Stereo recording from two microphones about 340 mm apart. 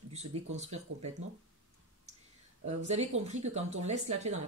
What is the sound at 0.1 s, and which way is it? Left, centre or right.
Speech, centre.